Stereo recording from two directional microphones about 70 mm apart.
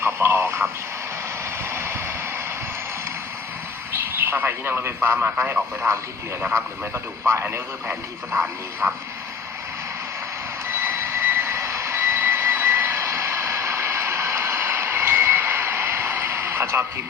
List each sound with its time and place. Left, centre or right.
0.0 s radio: right
1.7 s a sound: right
3.9 s a man's voice: right
5.8 s speech: right
10.7 s vehicle: right